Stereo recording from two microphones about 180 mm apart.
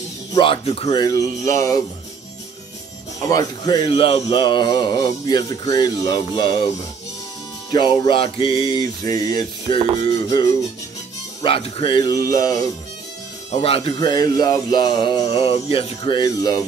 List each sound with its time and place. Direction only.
0.3 s speech: 30° left (ahead or behind)
1.5 s music: 15° left (ahead or behind)
3.3 s speech: 20° left (ahead or behind)
7.7 s speech: 25° left (ahead or behind)
11.4 s speech: 30° left (ahead or behind)
13.5 s speech: 30° left (ahead or behind)